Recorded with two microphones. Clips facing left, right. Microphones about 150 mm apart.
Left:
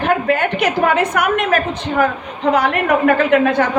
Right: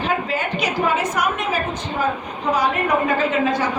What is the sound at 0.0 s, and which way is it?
A woman's voice, 60° left (ahead or behind).